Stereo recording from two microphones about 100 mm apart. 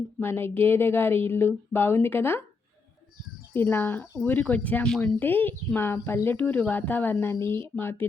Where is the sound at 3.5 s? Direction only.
20° left (ahead or behind).